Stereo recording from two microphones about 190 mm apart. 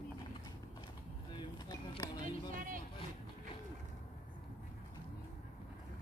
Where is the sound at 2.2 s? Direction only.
45° right (ahead or behind).